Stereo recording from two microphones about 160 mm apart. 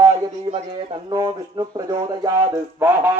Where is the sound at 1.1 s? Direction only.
25° right (ahead or behind).